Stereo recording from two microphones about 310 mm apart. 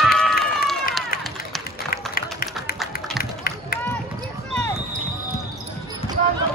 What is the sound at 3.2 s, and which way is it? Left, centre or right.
Run, left.